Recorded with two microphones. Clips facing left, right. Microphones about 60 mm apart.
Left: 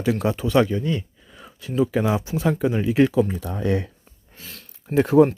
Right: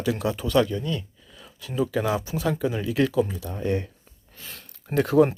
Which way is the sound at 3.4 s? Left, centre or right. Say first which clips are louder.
Left 3 dB; left.